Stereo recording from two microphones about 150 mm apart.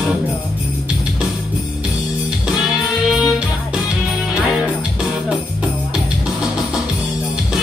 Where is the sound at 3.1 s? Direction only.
5° right (ahead or behind).